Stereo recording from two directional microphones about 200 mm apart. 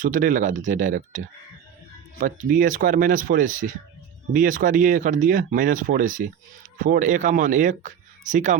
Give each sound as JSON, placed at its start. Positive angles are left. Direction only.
{"t": 0.0, "sound": "speech", "side_deg": -40}